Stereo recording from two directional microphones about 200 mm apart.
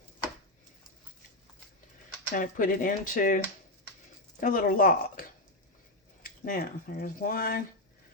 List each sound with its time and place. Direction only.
2.3 s speech: 45° left (ahead or behind)
6.2 s speech: 45° left (ahead or behind)